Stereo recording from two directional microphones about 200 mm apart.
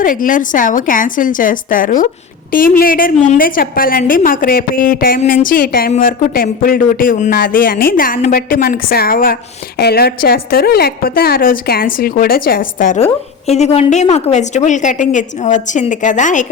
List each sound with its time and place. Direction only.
0.0 s a woman's voice: 40° left (ahead or behind)